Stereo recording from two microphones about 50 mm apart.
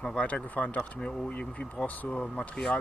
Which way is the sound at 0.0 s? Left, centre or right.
Left.